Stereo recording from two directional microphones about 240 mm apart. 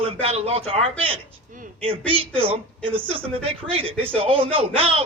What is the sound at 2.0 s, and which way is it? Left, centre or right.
Speech, right.